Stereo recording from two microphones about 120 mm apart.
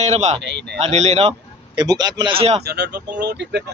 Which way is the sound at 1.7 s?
35° right (ahead or behind).